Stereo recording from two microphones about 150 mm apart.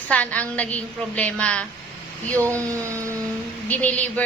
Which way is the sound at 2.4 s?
20° right (ahead or behind).